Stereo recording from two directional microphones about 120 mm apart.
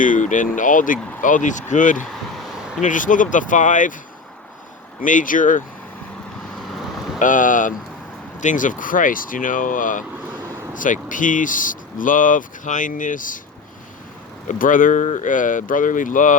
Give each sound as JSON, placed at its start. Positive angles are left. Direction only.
{"t": 0.0, "sound": "speech", "side_deg": 90}
{"t": 5.0, "sound": "speech", "side_deg": 90}
{"t": 7.2, "sound": "speech", "side_deg": 90}
{"t": 14.4, "sound": "speech", "side_deg": 90}